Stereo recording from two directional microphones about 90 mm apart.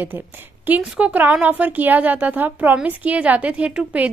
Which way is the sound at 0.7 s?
15° right (ahead or behind).